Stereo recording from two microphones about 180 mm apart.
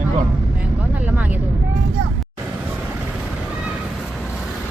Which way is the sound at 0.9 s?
10° right (ahead or behind).